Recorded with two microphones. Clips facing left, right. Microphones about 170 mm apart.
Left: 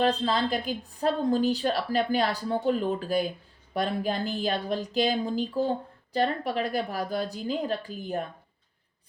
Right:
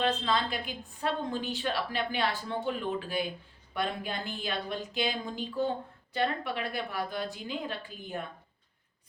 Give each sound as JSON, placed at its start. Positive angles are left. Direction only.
{"t": 0.0, "sound": "a woman's voice", "side_deg": 35}